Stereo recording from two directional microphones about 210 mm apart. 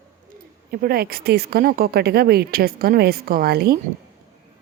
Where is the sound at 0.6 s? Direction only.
45° right (ahead or behind).